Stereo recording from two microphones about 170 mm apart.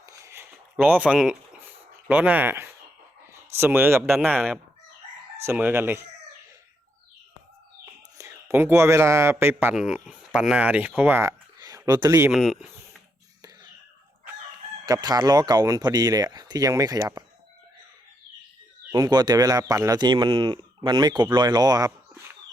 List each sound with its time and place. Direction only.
0.0 s a sound: 20° right (ahead or behind)
2.0 s speech: 10° right (ahead or behind)
5.4 s speech: 10° right (ahead or behind)
8.2 s a man's voice: 15° right (ahead or behind)
12.3 s speech: centre (ahead or behind)
13.4 s a sound: 25° right (ahead or behind)
14.8 s speech: 20° right (ahead or behind)
18.9 s speech: 20° right (ahead or behind)